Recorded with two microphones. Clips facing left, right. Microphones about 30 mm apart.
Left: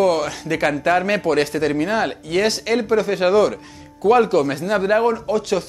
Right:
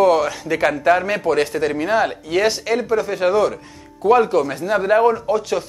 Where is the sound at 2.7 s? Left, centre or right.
Centre.